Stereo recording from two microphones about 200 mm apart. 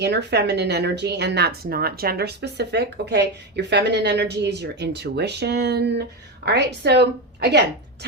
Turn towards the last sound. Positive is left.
turn(degrees=-55)  # may be behind; listen again after turning